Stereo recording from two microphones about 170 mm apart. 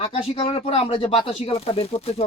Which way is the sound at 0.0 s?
35° left (ahead or behind).